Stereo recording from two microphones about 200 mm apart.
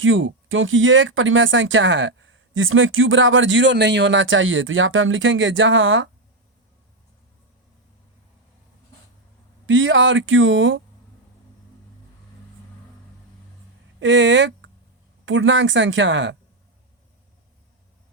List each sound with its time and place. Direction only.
0.0 s speech: 75° right (ahead or behind)
9.6 s speech: 70° right (ahead or behind)
14.0 s speech: 65° right (ahead or behind)